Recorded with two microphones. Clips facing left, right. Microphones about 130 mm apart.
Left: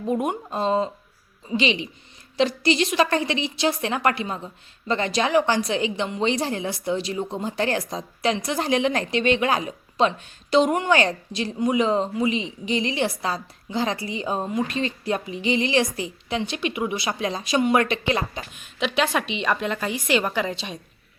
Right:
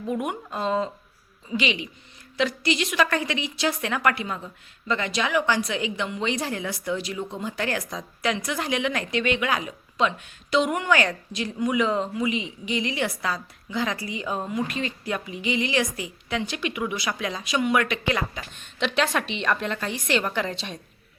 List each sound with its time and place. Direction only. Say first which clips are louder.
0.0 s a woman's voice: left 4 dB; 30° left (ahead or behind)
18.6 s a woman's voice: left 1 dB; 5° left (ahead or behind)